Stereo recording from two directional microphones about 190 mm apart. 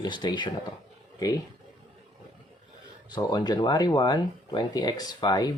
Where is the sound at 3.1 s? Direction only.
20° left (ahead or behind).